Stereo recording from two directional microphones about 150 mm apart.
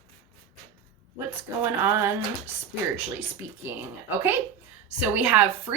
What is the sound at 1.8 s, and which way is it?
Speech, 15° right (ahead or behind).